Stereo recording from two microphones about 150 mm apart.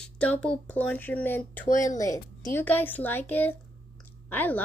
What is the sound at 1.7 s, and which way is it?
Speech, 55° left (ahead or behind).